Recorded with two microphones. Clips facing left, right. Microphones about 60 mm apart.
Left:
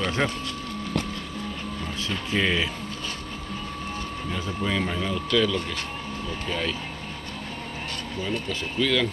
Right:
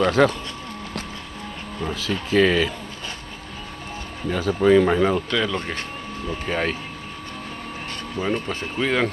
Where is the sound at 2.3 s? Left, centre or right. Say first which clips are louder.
Right 7 dB; right.